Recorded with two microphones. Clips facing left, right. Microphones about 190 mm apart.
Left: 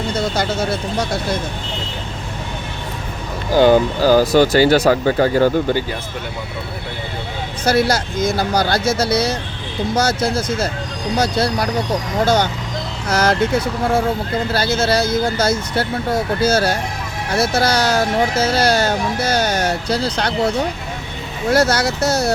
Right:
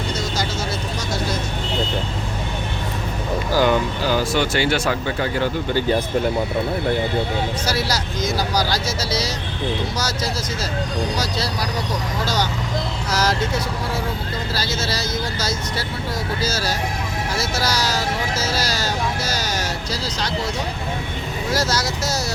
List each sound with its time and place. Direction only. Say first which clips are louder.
0.1 s vehicle: left 7 dB; 55° left (ahead or behind)
3.6 s speech: left 8 dB; 35° left (ahead or behind)
7.6 s speech: left 7 dB; 55° left (ahead or behind)
13.1 s vehicle: left 5 dB; 55° left (ahead or behind)
14.5 s speech: left 9 dB; 55° left (ahead or behind)
21.5 s speech: left 8 dB; 60° left (ahead or behind)